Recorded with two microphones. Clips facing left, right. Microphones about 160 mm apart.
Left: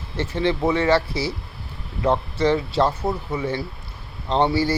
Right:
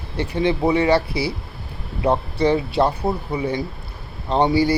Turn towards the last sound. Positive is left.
turn(degrees=-15)  # may be behind; listen again after turning